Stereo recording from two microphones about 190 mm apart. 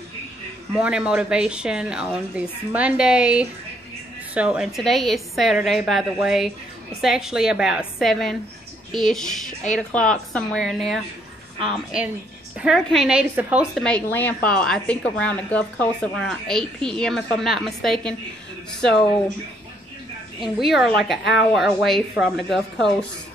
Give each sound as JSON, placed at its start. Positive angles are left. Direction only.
{"t": 0.7, "sound": "a woman's voice", "side_deg": -5}
{"t": 12.5, "sound": "a woman's voice", "side_deg": 0}
{"t": 13.8, "sound": "a woman's voice", "side_deg": 10}
{"t": 20.3, "sound": "a woman's voice", "side_deg": 0}